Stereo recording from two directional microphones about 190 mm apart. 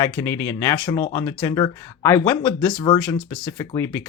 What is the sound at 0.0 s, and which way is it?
Speech, 15° left (ahead or behind).